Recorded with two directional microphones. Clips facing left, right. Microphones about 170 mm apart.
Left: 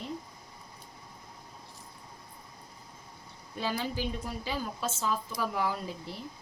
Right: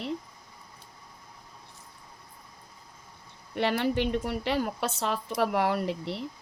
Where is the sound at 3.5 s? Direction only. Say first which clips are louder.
Right 7 dB; 70° right (ahead or behind).